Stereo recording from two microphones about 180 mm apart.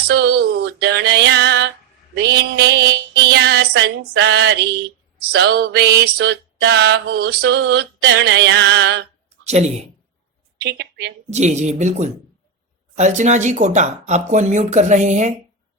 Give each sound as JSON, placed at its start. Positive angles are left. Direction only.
{"t": 0.1, "sound": "a sound", "side_deg": -65}
{"t": 2.1, "sound": "mantra", "side_deg": -65}
{"t": 5.2, "sound": "a sound", "side_deg": -60}
{"t": 9.5, "sound": "speech", "side_deg": -40}
{"t": 10.6, "sound": "speech", "side_deg": -65}
{"t": 11.3, "sound": "speech", "side_deg": -40}